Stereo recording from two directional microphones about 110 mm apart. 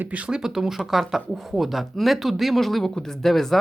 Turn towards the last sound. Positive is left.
turn(degrees=0)  # may be behind; listen again after turning